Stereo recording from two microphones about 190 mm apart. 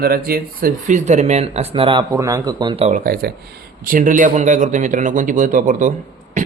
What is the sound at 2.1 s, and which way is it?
Speech, 15° right (ahead or behind).